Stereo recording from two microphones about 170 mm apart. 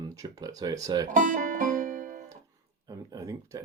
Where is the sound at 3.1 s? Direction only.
20° right (ahead or behind).